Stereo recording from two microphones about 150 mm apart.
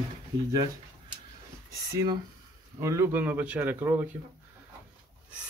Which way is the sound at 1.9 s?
25° right (ahead or behind).